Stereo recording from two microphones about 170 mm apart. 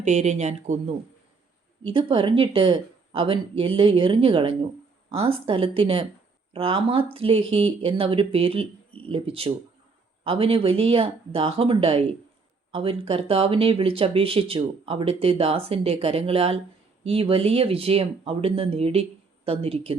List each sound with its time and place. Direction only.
0.0 s speech: 45° right (ahead or behind)
1.8 s speech: 30° right (ahead or behind)